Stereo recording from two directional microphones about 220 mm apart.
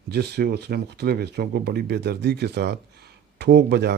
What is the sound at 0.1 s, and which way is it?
A man's voice, 45° right (ahead or behind).